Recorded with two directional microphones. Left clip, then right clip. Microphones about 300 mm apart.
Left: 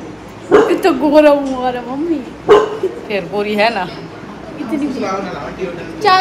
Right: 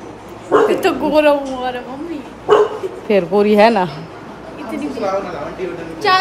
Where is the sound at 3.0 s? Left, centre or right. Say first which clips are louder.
Right 9 dB; right.